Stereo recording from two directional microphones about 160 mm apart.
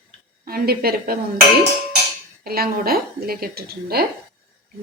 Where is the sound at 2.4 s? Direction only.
70° right (ahead or behind).